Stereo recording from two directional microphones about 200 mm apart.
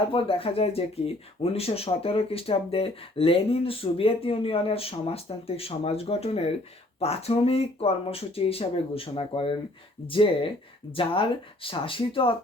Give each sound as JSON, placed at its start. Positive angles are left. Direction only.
{"t": 0.1, "sound": "speech", "side_deg": 30}